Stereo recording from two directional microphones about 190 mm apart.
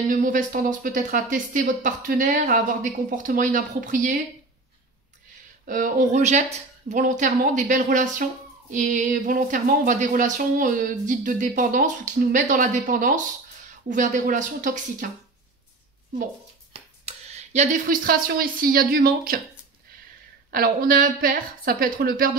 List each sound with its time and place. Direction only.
0.1 s speech: 45° right (ahead or behind)
5.7 s speech: 45° right (ahead or behind)
16.7 s speech: 35° right (ahead or behind)
20.5 s speech: 50° right (ahead or behind)